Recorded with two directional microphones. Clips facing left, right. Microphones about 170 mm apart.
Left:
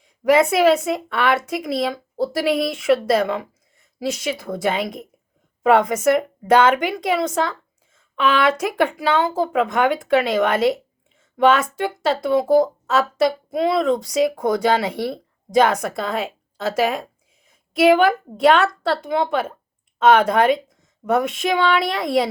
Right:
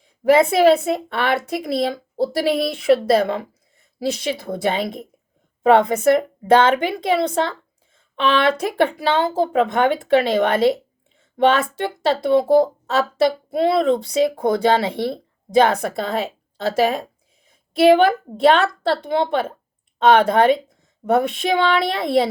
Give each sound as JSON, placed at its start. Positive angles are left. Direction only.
{"t": 0.3, "sound": "speech", "side_deg": -30}